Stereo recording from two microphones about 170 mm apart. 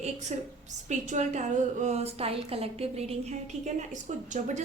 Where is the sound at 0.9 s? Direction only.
45° right (ahead or behind).